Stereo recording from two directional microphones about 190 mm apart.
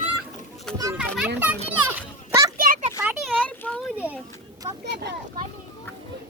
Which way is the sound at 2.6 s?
45° right (ahead or behind).